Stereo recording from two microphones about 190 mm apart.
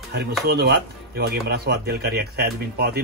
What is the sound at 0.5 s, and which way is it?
Speech, 55° right (ahead or behind).